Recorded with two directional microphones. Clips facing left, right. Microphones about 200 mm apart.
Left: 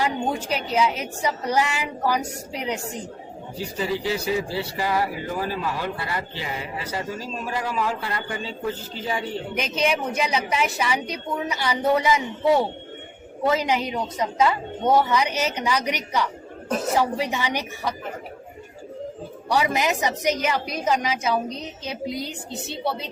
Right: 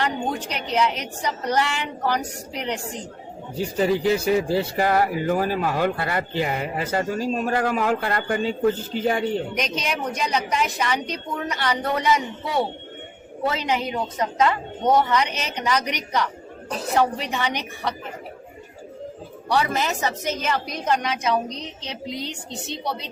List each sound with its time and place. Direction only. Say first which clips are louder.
0.0 s a woman's voice: left 1 dB; 10° left (ahead or behind)
3.8 s speech: right 6 dB; 50° right (ahead or behind)
9.6 s a woman's voice: left 3 dB; 5° left (ahead or behind)
13.6 s a woman's voice: even; 10° left (ahead or behind)
19.5 s a woman's voice: left 1 dB; 10° left (ahead or behind)